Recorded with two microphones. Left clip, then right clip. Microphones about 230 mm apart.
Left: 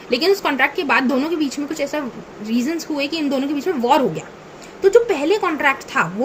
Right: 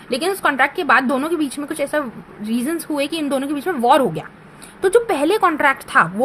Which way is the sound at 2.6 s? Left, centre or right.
Right.